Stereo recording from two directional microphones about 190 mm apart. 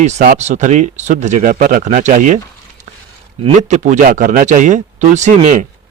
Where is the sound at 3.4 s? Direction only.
40° right (ahead or behind).